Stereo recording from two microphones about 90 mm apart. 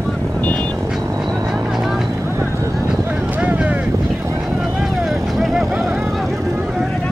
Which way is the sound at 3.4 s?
15° right (ahead or behind).